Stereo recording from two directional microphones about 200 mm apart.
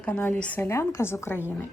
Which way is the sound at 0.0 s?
10° left (ahead or behind).